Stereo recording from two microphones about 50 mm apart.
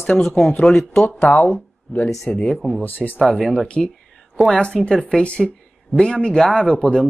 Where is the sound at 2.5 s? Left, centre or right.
Centre.